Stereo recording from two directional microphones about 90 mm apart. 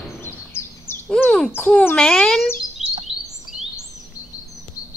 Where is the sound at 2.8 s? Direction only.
5° right (ahead or behind).